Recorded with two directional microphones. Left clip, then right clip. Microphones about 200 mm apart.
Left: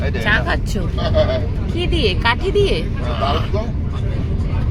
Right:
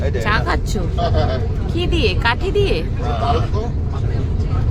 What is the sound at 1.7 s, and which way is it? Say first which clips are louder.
Speech: even; centre (ahead or behind).